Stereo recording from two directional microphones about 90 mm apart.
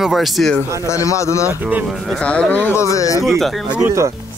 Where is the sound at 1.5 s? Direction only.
20° right (ahead or behind).